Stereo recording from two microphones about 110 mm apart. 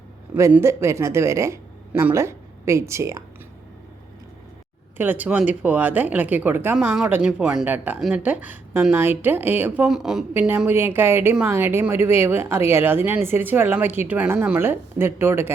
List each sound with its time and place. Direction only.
0.6 s speech: 25° right (ahead or behind)
1.9 s speech: 15° right (ahead or behind)
2.1 s speech: 25° right (ahead or behind)
4.9 s a woman's voice: 15° right (ahead or behind)
6.8 s a woman's voice: 5° right (ahead or behind)
9.9 s speech: 5° right (ahead or behind)
10.3 s a woman's voice: 15° right (ahead or behind)